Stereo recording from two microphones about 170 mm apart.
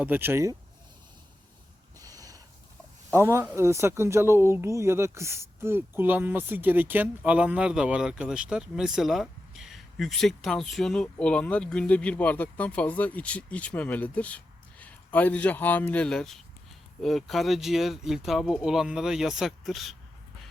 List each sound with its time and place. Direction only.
0.0 s speech: 10° right (ahead or behind)
2.0 s a sound: 20° right (ahead or behind)
3.1 s speech: 15° right (ahead or behind); by 20.0 s centre (ahead or behind)